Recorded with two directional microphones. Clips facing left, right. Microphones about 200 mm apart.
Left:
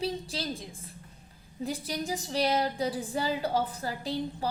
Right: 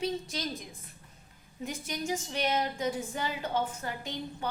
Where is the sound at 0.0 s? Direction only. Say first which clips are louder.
Even; 30° left (ahead or behind).